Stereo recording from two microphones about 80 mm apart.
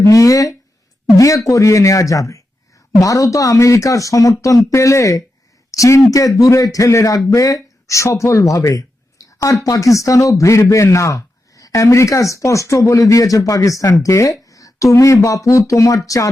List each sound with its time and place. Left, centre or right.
0.0 s a man's voice: left